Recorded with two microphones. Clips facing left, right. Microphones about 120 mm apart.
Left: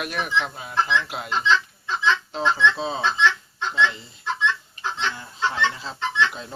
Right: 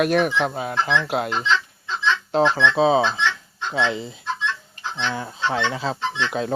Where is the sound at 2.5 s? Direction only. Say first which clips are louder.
Right 6 dB; 65° right (ahead or behind).